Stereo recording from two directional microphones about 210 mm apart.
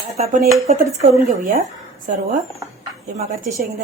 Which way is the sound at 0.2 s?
40° right (ahead or behind).